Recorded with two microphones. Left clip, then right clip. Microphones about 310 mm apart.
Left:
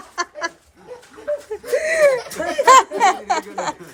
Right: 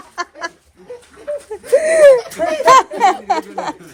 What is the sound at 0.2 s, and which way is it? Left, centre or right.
Goat, centre.